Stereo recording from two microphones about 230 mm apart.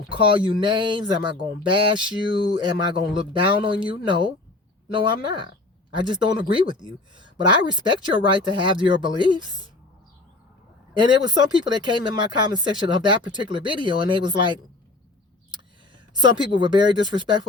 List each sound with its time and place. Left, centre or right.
0.2 s speech: right
10.9 s speech: centre
16.1 s speech: centre